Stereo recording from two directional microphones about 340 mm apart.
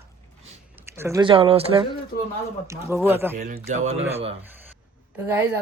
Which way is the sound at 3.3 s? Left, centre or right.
Centre.